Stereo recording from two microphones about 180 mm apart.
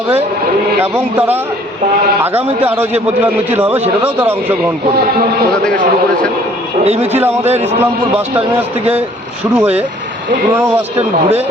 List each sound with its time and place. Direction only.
2.2 s a man's voice: 10° right (ahead or behind)
6.8 s a man's voice: 35° right (ahead or behind)
9.6 s a man's voice: 10° right (ahead or behind)